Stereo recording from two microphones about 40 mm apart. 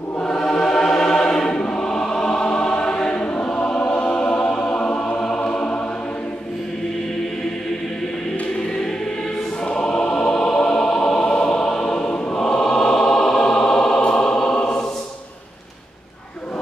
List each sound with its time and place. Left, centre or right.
0.2 s choir: centre
4.1 s music: left
9.7 s choir: left
11.9 s choir: left
14.0 s choir: left